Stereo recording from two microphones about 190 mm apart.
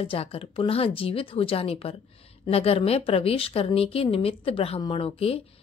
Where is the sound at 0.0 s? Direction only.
30° left (ahead or behind).